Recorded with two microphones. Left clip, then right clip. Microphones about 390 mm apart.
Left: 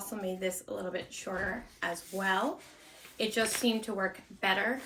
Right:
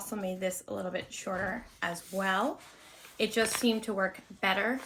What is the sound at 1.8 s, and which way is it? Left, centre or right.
Speech, centre.